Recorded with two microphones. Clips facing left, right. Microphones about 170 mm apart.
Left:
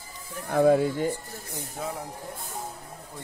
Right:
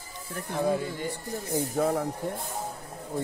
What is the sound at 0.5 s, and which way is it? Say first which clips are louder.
Speech: left 7 dB; 60° left (ahead or behind).